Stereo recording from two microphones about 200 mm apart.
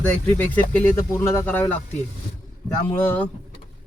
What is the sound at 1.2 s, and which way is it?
Speech, 10° left (ahead or behind).